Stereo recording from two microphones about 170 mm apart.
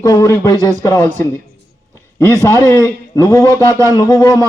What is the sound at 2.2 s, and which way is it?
Speech, 15° left (ahead or behind).